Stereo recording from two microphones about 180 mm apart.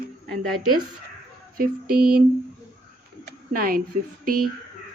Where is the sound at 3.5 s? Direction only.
50° right (ahead or behind).